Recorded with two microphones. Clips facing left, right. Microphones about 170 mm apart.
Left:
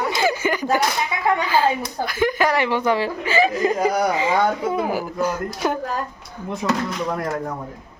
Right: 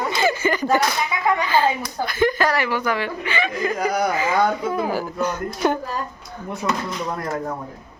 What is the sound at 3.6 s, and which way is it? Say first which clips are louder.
A woman's voice: left 2 dB; 25° left (ahead or behind).